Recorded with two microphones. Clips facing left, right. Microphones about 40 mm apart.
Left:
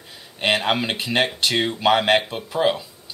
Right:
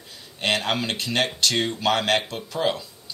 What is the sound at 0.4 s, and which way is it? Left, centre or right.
Speech, centre.